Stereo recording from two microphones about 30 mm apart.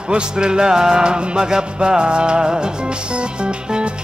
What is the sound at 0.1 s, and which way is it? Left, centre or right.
Music, right.